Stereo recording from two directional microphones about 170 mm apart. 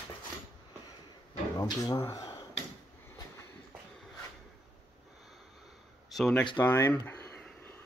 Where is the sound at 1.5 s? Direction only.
20° left (ahead or behind).